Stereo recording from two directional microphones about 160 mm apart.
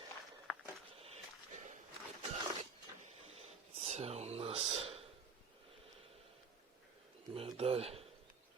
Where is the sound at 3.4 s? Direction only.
40° right (ahead or behind).